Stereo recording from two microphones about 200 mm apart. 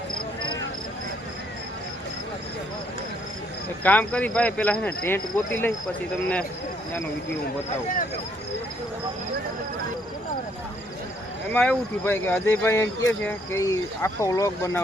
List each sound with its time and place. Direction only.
3.8 s speech: 5° left (ahead or behind)
11.5 s speech: 5° left (ahead or behind)